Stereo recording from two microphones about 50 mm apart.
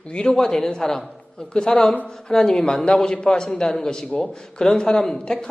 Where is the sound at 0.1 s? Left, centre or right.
Centre.